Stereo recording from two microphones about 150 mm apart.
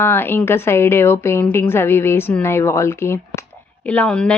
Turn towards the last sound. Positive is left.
turn(degrees=5)  # may be behind; listen again after turning